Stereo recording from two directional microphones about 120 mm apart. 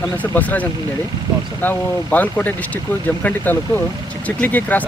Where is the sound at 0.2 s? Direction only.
15° left (ahead or behind).